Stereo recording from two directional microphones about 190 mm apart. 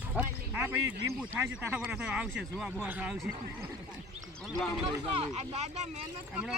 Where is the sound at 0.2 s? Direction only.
10° right (ahead or behind).